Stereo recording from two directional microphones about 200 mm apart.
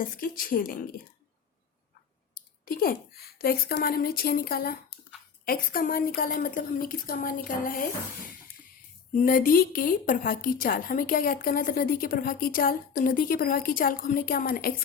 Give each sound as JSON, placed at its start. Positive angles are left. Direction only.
{"t": 0.0, "sound": "speech", "side_deg": 45}
{"t": 2.3, "sound": "a sound", "side_deg": 45}
{"t": 3.4, "sound": "speech", "side_deg": 50}
{"t": 9.1, "sound": "speech", "side_deg": 40}